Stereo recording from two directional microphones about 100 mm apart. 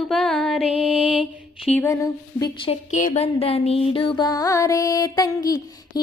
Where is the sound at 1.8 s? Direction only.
35° left (ahead or behind).